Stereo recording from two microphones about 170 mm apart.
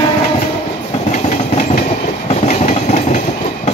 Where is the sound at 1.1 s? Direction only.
50° left (ahead or behind).